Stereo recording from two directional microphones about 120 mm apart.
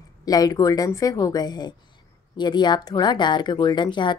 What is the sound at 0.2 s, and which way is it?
A woman's voice, 30° left (ahead or behind).